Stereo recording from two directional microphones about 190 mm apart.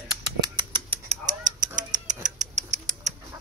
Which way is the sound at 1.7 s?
40° right (ahead or behind).